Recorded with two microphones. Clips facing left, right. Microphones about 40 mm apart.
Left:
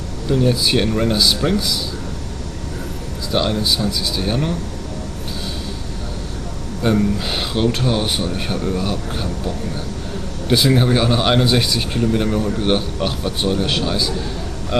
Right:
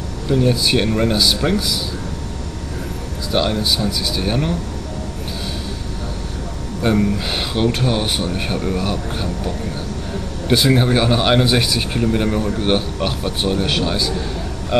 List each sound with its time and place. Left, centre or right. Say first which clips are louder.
0.3 s speech: even; centre
3.3 s speech: even; centre
6.8 s speech: even; centre
10.5 s speech: even; centre